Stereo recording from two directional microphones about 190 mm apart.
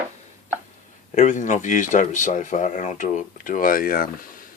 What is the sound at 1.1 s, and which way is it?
Speech, 40° left (ahead or behind).